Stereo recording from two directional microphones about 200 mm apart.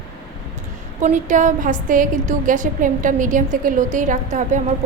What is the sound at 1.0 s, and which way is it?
A woman's voice, 40° right (ahead or behind).